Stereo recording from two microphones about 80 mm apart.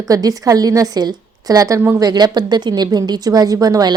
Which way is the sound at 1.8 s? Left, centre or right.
Right.